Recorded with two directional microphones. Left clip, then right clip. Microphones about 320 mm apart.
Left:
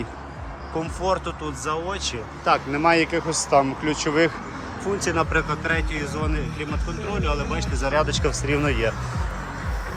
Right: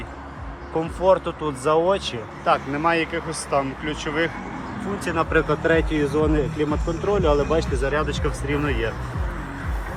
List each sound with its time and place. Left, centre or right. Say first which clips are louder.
0.8 s speech: right 6 dB; centre